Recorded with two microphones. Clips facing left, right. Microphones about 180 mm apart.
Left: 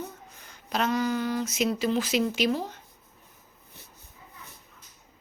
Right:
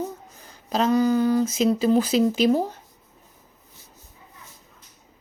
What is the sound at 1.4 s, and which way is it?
Speech, 35° right (ahead or behind).